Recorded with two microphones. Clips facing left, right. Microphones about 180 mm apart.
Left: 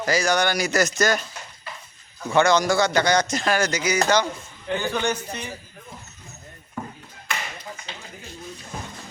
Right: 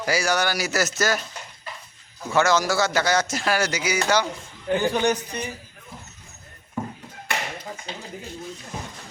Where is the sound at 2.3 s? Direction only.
5° right (ahead or behind).